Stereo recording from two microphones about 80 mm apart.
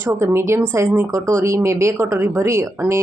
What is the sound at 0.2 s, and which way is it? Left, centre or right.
Speech, right.